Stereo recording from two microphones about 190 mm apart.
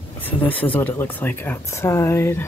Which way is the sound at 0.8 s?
10° left (ahead or behind).